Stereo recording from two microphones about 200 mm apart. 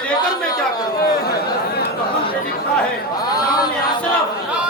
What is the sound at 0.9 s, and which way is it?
Chatter, 50° left (ahead or behind).